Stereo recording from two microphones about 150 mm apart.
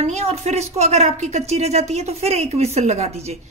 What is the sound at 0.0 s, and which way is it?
Speech, 45° right (ahead or behind).